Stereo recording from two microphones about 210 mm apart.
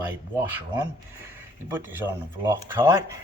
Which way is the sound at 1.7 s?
10° right (ahead or behind).